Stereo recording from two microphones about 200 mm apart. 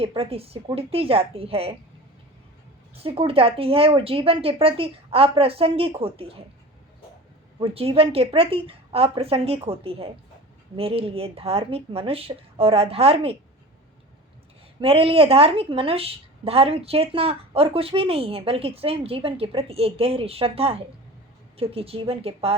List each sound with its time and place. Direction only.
0.0 s a woman's voice: 30° right (ahead or behind)
2.9 s a woman's voice: 30° right (ahead or behind)
7.6 s a woman's voice: 30° right (ahead or behind)
14.8 s a woman's voice: 30° right (ahead or behind)